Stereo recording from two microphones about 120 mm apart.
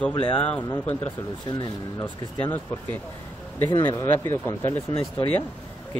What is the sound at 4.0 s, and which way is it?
Speech, 20° left (ahead or behind).